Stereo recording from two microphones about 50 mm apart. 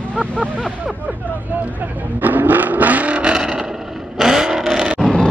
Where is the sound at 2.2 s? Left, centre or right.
Right; by 4.9 s centre.